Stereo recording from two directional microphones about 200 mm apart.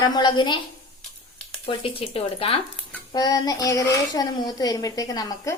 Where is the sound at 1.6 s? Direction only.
30° left (ahead or behind).